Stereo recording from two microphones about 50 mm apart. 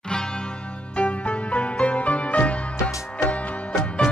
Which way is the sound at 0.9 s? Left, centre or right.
Left.